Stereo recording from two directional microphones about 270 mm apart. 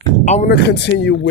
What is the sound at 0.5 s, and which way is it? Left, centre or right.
Speech, left.